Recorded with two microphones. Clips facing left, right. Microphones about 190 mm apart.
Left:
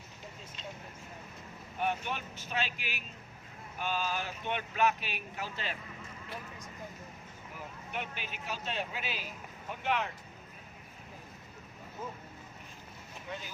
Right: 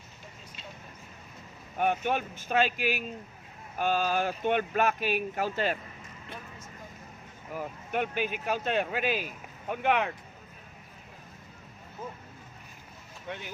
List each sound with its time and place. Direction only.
1.8 s speech: 50° right (ahead or behind)
7.5 s speech: 50° right (ahead or behind)